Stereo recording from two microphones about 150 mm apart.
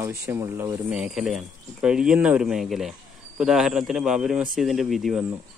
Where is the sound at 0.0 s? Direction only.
20° right (ahead or behind).